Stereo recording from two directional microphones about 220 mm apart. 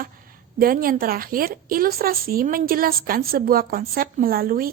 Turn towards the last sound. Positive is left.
turn(degrees=-40)  # may be behind; listen again after turning